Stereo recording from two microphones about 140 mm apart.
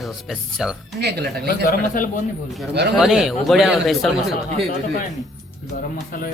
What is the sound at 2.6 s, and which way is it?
Speech, centre (ahead or behind).